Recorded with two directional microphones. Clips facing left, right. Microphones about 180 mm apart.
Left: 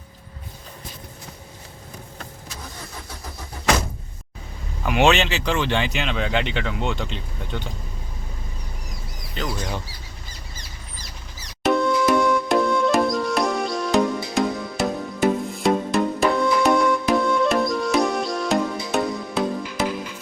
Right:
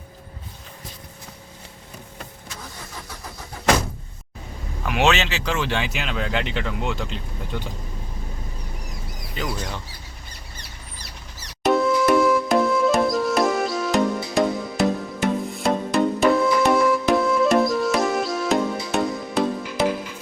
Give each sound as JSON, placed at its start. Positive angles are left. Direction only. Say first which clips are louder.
{"t": 4.9, "sound": "speech", "louder": "left 3 dB", "side_deg": 0}
{"t": 9.3, "sound": "speech", "louder": "even", "side_deg": -10}
{"t": 10.6, "sound": "chirp", "louder": "even", "side_deg": -65}
{"t": 11.6, "sound": "music", "louder": "right 1 dB", "side_deg": 0}